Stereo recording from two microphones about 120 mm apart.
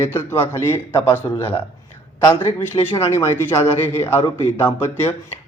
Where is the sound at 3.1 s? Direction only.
20° left (ahead or behind).